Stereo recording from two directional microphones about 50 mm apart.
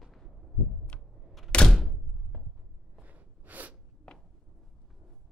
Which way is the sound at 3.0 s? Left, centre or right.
Right.